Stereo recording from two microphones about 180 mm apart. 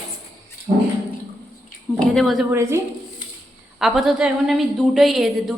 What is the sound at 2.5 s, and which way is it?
Speech, 15° right (ahead or behind).